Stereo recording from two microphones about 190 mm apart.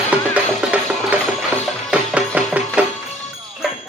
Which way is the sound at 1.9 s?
5° right (ahead or behind).